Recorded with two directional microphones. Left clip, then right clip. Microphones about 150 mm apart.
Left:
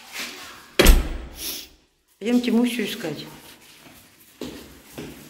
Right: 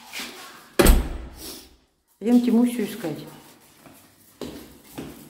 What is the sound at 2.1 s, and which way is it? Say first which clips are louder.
Speech: right 1 dB; 25° right (ahead or behind).